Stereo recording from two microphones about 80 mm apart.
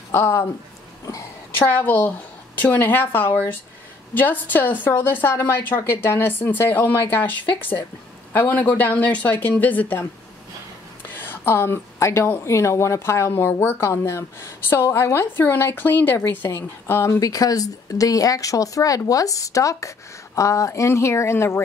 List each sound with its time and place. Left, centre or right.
0.1 s a woman's voice: left
1.7 s a woman's voice: left
11.1 s a woman's voice: left
17.2 s a woman's voice: left